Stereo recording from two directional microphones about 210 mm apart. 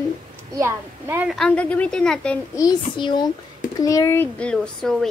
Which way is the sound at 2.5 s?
20° left (ahead or behind).